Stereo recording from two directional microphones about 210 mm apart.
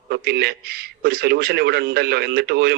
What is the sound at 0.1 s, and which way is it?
A man's voice, 50° right (ahead or behind).